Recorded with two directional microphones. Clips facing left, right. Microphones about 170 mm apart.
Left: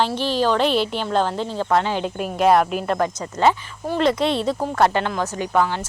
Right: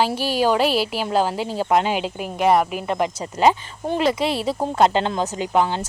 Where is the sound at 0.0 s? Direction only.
10° right (ahead or behind).